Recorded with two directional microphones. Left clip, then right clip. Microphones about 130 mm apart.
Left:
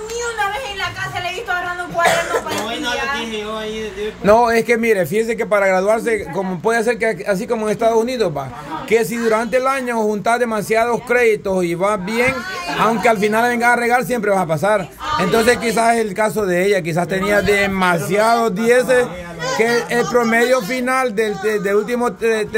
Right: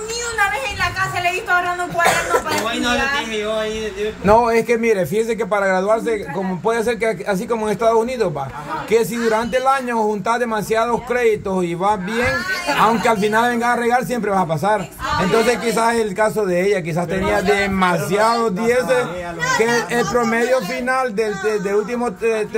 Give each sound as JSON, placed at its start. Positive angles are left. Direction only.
{"t": 4.2, "sound": "a man's voice", "side_deg": 35}